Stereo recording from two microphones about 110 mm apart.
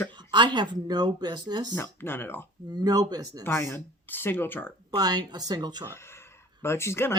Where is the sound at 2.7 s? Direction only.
35° right (ahead or behind).